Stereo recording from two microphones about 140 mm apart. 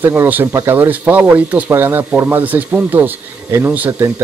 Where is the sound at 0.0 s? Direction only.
15° right (ahead or behind).